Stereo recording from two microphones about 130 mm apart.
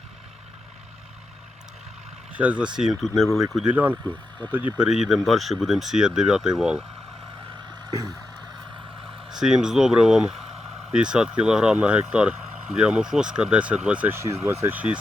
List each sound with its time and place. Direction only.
2.3 s speech: 10° right (ahead or behind)
3.5 s speech: 10° right (ahead or behind)
9.0 s speech: 5° right (ahead or behind)